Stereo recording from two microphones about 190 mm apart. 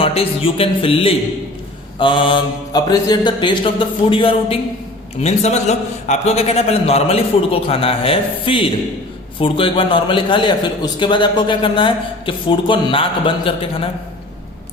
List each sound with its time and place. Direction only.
0.0 s a man's voice: 30° left (ahead or behind)